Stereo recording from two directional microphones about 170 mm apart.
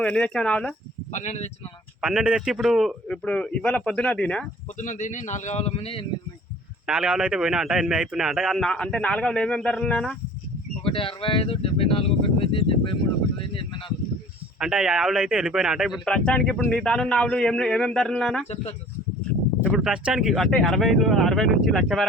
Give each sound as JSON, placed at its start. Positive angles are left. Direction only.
{"t": 0.0, "sound": "speech", "side_deg": 5}
{"t": 1.1, "sound": "a man's voice", "side_deg": 45}
{"t": 2.0, "sound": "speech", "side_deg": -5}
{"t": 4.8, "sound": "a man's voice", "side_deg": 45}
{"t": 6.8, "sound": "speech", "side_deg": -5}
{"t": 10.8, "sound": "speech", "side_deg": 30}
{"t": 14.6, "sound": "speech", "side_deg": -5}
{"t": 18.4, "sound": "speech", "side_deg": 35}
{"t": 19.6, "sound": "speech", "side_deg": 0}